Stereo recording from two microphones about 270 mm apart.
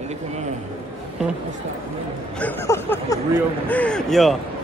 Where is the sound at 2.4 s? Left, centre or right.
Centre.